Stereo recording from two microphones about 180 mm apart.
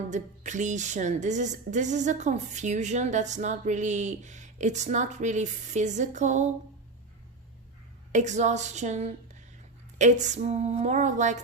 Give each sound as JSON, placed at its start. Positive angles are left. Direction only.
{"t": 0.1, "sound": "speech", "side_deg": -40}
{"t": 8.1, "sound": "speech", "side_deg": -40}